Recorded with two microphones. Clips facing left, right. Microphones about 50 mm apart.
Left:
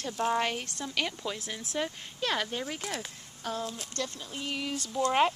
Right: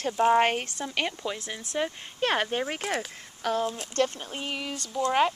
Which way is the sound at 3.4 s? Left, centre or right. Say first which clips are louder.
Right 7 dB; right.